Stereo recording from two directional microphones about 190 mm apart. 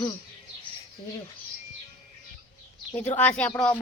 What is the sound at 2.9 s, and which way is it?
Speech, 10° left (ahead or behind).